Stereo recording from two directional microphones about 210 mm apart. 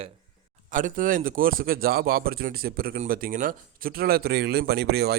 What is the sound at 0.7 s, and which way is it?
Speech, 40° right (ahead or behind).